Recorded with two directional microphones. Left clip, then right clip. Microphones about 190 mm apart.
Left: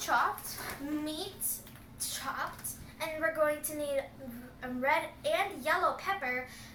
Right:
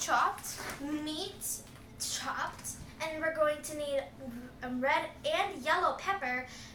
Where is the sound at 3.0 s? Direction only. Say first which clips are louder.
Even; 5° right (ahead or behind).